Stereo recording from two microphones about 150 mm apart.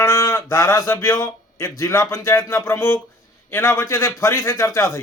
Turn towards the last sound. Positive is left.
turn(degrees=15)  # may be behind; listen again after turning